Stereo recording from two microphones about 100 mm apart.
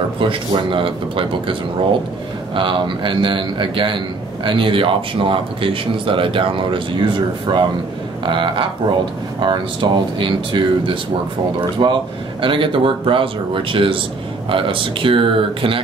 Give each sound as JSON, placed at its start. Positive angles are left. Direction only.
{"t": 0.2, "sound": "speech", "side_deg": -60}